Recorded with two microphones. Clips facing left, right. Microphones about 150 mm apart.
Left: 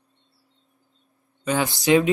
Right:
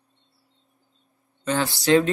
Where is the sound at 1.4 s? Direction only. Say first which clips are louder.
Left 1 dB; 10° left (ahead or behind).